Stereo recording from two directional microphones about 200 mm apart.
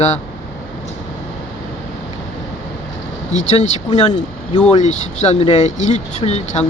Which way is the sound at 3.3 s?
35° left (ahead or behind).